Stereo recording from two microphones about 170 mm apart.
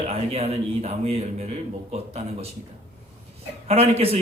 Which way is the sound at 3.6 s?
35° right (ahead or behind).